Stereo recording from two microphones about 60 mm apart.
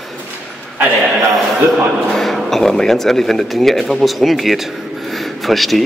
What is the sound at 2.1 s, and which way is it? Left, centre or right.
Speech, centre.